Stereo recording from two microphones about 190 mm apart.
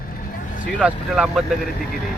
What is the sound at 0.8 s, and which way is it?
Speech, 5° right (ahead or behind).